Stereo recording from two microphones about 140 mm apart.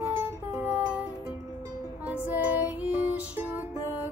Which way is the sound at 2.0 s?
10° right (ahead or behind).